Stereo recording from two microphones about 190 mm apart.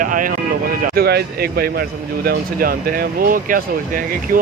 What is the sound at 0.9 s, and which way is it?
Speech, 55° right (ahead or behind).